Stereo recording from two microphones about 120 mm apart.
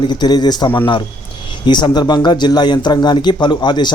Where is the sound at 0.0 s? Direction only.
40° left (ahead or behind).